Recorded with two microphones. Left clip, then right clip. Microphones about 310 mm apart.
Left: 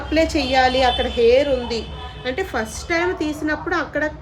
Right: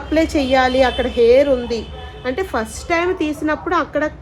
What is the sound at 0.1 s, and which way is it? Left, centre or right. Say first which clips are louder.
A woman's voice: right 2 dB; centre.